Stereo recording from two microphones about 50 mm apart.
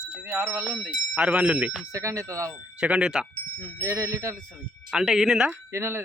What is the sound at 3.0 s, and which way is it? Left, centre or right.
Speech, centre.